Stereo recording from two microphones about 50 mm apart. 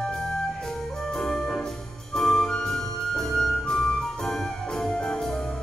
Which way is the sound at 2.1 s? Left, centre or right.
Centre.